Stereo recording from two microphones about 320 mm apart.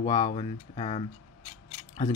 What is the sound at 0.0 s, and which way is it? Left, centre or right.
Speech, centre.